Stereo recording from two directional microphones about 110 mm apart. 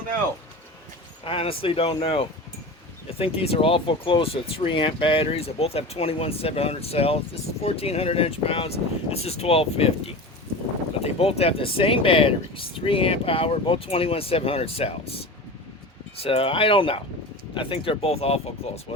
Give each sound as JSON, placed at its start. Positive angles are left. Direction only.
{"t": 1.2, "sound": "speech", "side_deg": 55}
{"t": 16.2, "sound": "speech", "side_deg": 60}